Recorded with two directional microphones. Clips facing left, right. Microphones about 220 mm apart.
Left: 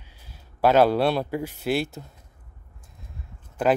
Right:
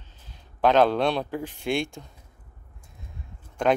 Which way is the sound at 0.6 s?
10° left (ahead or behind).